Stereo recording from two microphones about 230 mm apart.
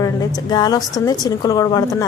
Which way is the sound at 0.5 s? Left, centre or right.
Centre.